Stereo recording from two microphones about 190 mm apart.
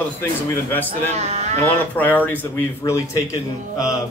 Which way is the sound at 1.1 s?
35° right (ahead or behind).